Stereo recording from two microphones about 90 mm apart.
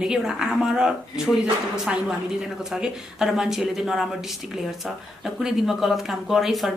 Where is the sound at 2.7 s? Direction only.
5° right (ahead or behind).